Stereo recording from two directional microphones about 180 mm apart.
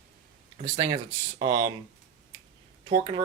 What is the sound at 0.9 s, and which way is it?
Speech, 25° right (ahead or behind).